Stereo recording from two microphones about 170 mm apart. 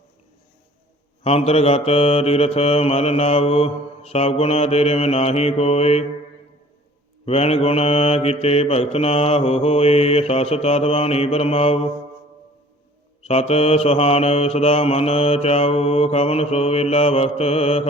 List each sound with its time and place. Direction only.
1.2 s mantra: 35° left (ahead or behind)
7.3 s mantra: 35° left (ahead or behind)
13.2 s mantra: 35° left (ahead or behind)